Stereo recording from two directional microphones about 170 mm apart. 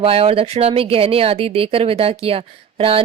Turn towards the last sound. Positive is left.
turn(degrees=-35)  # may be behind; listen again after turning